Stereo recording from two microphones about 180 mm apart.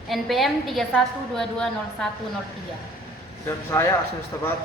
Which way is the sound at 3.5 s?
15° left (ahead or behind).